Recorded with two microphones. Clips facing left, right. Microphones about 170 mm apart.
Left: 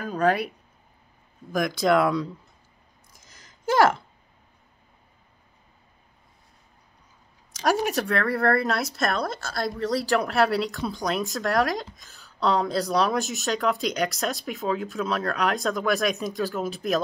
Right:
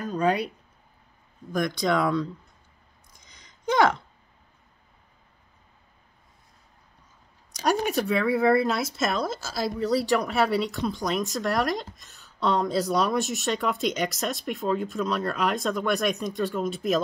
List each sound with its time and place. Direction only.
0.1 s speech: 5° left (ahead or behind)
1.5 s speech: 5° left (ahead or behind)
3.1 s a sound: 5° left (ahead or behind)
7.6 s speech: centre (ahead or behind)